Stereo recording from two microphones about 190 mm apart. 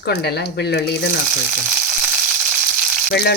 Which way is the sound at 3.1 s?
60° left (ahead or behind).